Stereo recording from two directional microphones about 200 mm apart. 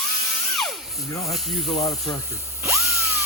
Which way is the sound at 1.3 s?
Centre (ahead or behind).